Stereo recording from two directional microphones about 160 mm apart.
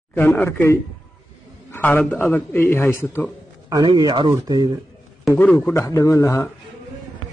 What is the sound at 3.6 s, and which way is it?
Speech, 25° right (ahead or behind).